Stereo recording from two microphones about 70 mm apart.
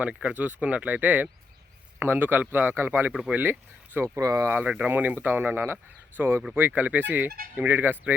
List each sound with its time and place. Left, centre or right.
0.0 s speech: centre; by 3.1 s right
3.1 s speech: centre
3.3 s speech: right
4.2 s speech: right
4.4 s speech: right